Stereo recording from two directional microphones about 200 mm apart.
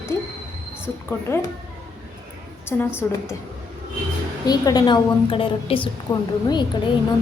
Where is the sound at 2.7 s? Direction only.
10° left (ahead or behind).